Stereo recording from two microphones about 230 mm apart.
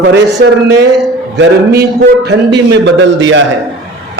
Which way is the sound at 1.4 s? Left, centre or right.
Right.